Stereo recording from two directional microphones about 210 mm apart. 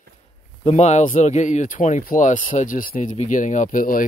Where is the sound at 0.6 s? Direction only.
30° left (ahead or behind).